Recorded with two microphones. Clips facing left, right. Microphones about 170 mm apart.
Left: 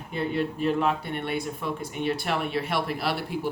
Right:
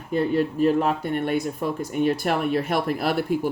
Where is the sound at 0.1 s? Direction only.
40° right (ahead or behind).